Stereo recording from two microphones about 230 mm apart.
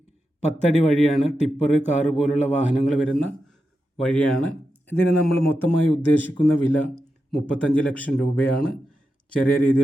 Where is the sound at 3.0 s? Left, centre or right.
Centre.